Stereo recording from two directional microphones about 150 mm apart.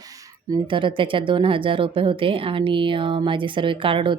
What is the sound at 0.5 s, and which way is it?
Speech, 35° right (ahead or behind).